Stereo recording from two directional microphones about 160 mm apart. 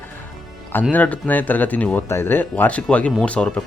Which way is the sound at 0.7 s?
10° left (ahead or behind).